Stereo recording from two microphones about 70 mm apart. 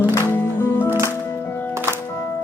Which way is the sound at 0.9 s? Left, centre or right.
Right.